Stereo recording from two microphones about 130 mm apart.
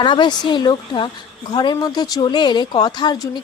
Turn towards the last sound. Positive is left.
turn(degrees=35)  # may be behind; listen again after turning